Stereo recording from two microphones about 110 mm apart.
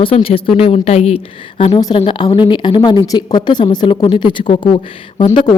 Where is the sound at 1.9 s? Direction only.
55° left (ahead or behind).